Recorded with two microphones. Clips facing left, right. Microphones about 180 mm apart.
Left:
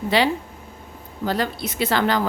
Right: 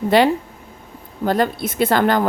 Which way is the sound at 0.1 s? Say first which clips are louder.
Right 5 dB; 50° right (ahead or behind).